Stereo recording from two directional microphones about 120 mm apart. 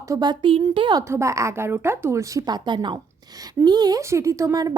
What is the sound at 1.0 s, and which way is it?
A woman's voice, 25° right (ahead or behind).